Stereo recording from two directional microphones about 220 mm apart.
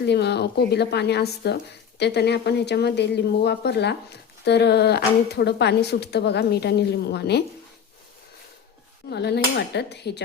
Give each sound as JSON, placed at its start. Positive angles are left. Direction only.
{"t": 0.0, "sound": "a woman's voice", "side_deg": 50}
{"t": 9.0, "sound": "a woman's voice", "side_deg": 50}